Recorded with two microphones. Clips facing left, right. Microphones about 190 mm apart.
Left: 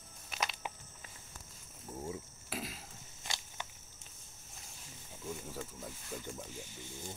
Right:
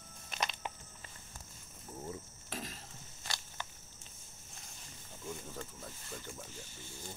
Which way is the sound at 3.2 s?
20° left (ahead or behind).